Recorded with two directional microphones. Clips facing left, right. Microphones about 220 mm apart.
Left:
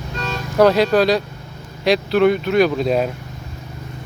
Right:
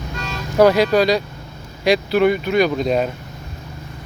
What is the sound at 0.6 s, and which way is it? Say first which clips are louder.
Speech: even; centre (ahead or behind).